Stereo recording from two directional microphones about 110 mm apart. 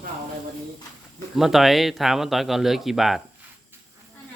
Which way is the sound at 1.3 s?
5° right (ahead or behind).